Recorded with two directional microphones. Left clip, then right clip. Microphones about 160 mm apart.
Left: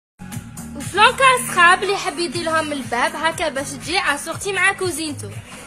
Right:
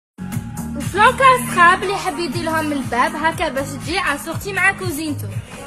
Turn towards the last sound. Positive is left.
turn(degrees=30)  # may be behind; listen again after turning